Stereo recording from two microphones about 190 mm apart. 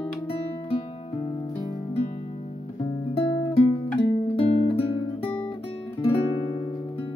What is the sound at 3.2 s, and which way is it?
Music, 30° left (ahead or behind).